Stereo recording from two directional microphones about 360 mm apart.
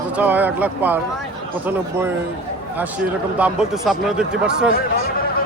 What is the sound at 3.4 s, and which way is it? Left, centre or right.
Speech, centre.